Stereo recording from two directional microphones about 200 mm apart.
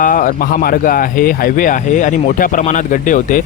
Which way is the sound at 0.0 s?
40° left (ahead or behind).